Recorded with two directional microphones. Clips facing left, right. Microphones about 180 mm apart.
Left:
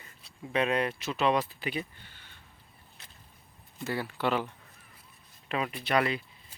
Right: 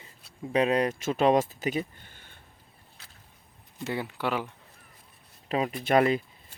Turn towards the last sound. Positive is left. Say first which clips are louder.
# right 5 dB
turn(degrees=-45)  # may be behind; listen again after turning